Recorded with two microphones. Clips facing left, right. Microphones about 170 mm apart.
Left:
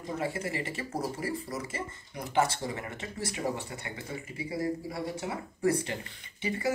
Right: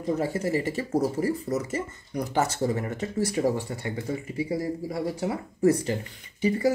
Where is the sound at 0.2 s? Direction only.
40° right (ahead or behind).